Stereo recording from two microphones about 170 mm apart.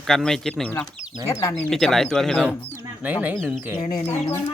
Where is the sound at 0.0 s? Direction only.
Centre (ahead or behind); by 1.5 s 20° left (ahead or behind).